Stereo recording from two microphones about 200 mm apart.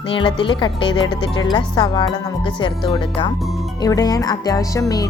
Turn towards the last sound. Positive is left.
turn(degrees=15)  # may be behind; listen again after turning